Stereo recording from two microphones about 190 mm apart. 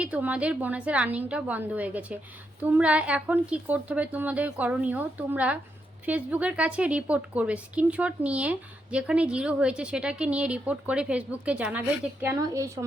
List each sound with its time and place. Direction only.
0.0 s a woman's voice: 5° right (ahead or behind)